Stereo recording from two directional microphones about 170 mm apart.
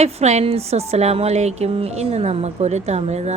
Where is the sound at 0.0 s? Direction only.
40° right (ahead or behind).